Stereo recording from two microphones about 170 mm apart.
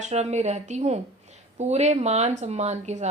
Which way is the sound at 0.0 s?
40° right (ahead or behind).